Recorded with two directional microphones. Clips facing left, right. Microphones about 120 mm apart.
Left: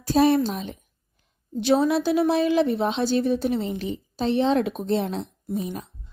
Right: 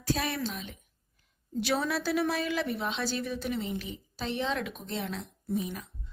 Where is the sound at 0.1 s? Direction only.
30° left (ahead or behind).